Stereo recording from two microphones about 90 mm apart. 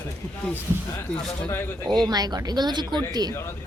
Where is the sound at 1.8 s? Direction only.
50° right (ahead or behind).